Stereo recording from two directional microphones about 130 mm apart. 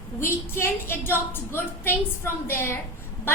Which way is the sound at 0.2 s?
20° left (ahead or behind).